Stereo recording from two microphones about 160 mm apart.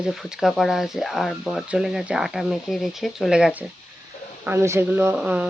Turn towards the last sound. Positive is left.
turn(degrees=-5)  # may be behind; listen again after turning